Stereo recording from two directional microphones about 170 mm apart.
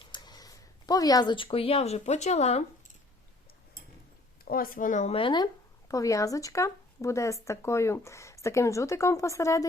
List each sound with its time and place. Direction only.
0.1 s speech: 25° left (ahead or behind); by 2.6 s 40° left (ahead or behind)
4.4 s speech: 60° left (ahead or behind); by 9.6 s 20° left (ahead or behind)